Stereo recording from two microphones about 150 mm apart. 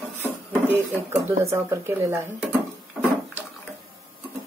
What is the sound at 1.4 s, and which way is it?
Speech, 20° right (ahead or behind).